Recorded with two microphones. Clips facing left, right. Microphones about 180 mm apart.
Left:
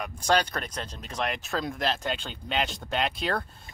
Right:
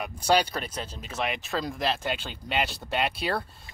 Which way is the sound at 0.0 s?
10° right (ahead or behind).